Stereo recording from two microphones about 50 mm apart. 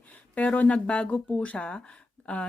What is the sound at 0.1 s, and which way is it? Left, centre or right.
Speech, left.